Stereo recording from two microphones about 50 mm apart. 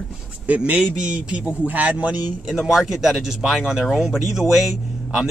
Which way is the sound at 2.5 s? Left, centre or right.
Centre.